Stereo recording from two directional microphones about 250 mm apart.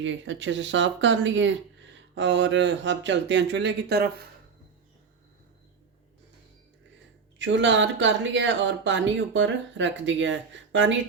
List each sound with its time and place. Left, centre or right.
0.0 s speech: right
7.3 s speech: right